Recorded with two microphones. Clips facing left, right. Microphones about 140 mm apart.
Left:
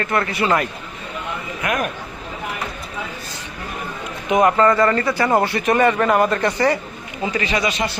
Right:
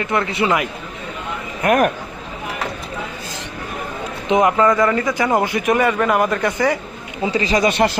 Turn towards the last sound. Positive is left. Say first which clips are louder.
# right 6 dB
turn(degrees=-60)  # may be behind; listen again after turning